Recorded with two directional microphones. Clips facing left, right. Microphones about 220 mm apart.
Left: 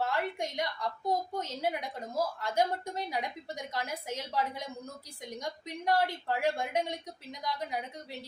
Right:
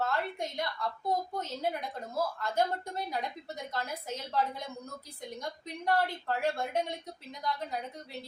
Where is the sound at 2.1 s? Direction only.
15° left (ahead or behind).